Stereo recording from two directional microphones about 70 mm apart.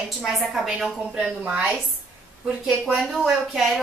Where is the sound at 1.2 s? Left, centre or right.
Centre.